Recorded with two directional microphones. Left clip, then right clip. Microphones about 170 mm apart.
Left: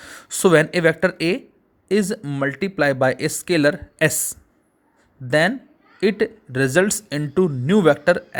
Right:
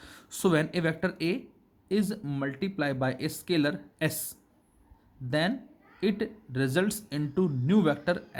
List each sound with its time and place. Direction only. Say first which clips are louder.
0.0 s speech: left 11 dB; 35° left (ahead or behind)